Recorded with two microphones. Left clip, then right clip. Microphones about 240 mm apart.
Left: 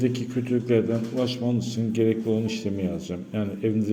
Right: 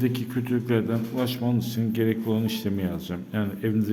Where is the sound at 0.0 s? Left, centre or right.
Centre.